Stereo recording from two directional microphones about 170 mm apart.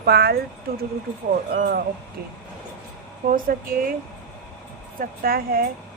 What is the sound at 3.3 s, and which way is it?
Speech, 55° right (ahead or behind).